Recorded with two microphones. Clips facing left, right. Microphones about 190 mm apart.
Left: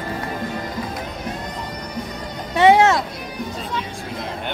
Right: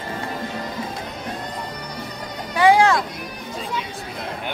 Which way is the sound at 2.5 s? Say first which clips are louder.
Left 2 dB; 25° left (ahead or behind).